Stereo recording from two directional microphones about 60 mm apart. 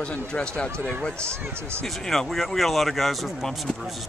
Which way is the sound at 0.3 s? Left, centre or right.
Centre.